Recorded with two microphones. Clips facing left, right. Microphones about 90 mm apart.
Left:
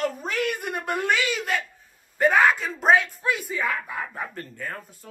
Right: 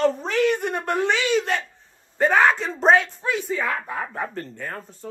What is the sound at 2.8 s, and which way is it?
Speech, 5° left (ahead or behind).